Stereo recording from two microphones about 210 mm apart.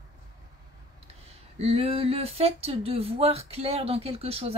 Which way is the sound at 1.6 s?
30° right (ahead or behind).